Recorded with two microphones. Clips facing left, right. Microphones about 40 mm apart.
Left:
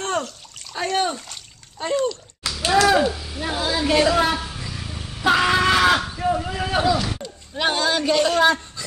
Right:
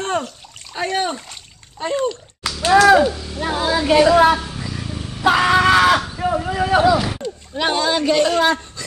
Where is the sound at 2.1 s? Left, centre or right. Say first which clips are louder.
Right 3 dB; right.